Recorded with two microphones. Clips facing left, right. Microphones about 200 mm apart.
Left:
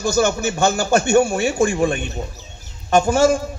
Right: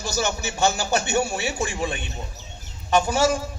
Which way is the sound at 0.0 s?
50° left (ahead or behind).